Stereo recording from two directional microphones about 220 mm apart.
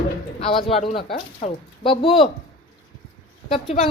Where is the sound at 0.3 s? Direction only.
25° left (ahead or behind).